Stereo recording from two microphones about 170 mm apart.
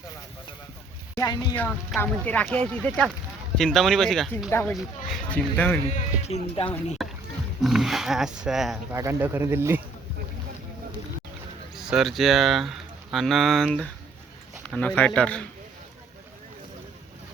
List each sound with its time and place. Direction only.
1.1 s a sound: 20° left (ahead or behind)
2.0 s speech: 10° left (ahead or behind)
4.4 s speech: 15° left (ahead or behind)
4.8 s speech: centre (ahead or behind)
5.9 s speech: 40° left (ahead or behind)
7.0 s rowboat: centre (ahead or behind)
7.6 s speech: centre (ahead or behind)
8.9 s speech: 15° right (ahead or behind)
11.8 s speech: 5° right (ahead or behind)